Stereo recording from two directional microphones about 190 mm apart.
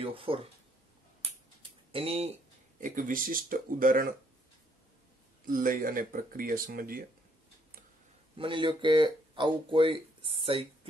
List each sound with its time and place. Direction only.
0.0 s speech: 30° right (ahead or behind)
1.9 s speech: 30° right (ahead or behind)
2.8 s speech: 45° right (ahead or behind)
5.4 s speech: 45° right (ahead or behind)
8.4 s speech: 25° right (ahead or behind)